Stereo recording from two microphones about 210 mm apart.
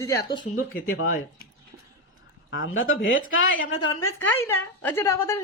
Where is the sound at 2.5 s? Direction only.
70° left (ahead or behind).